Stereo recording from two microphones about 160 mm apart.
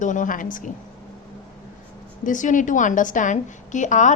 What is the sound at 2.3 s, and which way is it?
A woman's voice, 55° left (ahead or behind).